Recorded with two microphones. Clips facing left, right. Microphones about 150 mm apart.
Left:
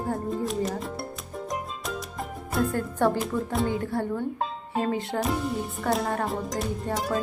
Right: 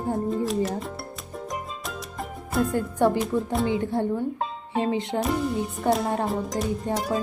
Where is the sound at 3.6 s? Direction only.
20° right (ahead or behind).